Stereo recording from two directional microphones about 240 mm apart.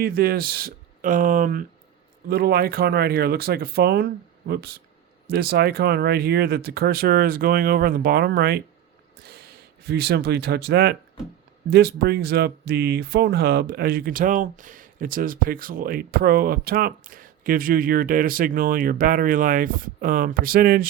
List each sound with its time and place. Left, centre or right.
0.0 s speech: right